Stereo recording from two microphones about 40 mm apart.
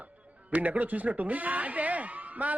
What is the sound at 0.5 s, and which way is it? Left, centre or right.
Speech, right.